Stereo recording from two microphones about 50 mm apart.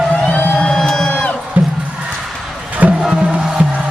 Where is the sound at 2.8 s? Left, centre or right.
Right.